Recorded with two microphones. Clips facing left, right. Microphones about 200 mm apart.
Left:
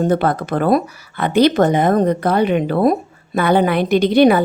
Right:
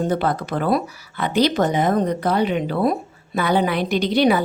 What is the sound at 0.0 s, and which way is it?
Speech, 55° left (ahead or behind).